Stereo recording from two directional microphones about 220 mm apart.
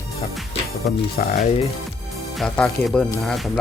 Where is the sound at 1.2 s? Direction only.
40° left (ahead or behind).